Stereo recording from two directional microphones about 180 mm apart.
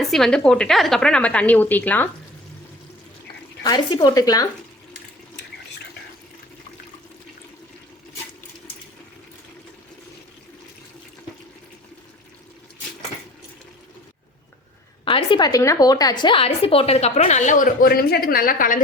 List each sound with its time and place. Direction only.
0.1 s a woman's voice: 5° left (ahead or behind)
3.6 s speech: 25° left (ahead or behind)
15.0 s a woman's voice: 30° left (ahead or behind); by 18.8 s 50° left (ahead or behind)